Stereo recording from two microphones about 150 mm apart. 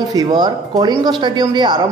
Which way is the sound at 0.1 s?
25° right (ahead or behind).